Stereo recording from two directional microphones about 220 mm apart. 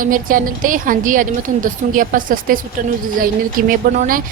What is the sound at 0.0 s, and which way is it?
A woman's voice, 40° right (ahead or behind).